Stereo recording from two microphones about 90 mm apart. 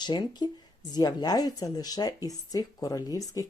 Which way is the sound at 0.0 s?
55° left (ahead or behind).